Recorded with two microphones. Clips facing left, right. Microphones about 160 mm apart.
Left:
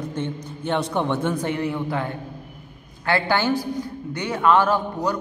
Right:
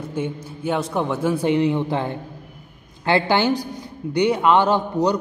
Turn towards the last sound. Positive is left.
turn(degrees=-20)  # may be behind; listen again after turning